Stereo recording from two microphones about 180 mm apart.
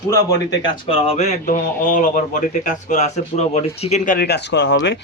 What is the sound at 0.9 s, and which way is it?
A man's voice, 35° left (ahead or behind).